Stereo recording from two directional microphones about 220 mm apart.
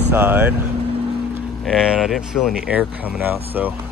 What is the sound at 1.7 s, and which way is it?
Speech, centre (ahead or behind).